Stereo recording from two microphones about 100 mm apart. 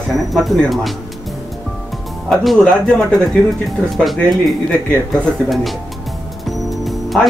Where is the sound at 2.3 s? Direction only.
Centre (ahead or behind).